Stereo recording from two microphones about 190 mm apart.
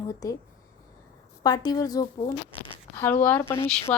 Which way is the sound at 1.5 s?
20° left (ahead or behind).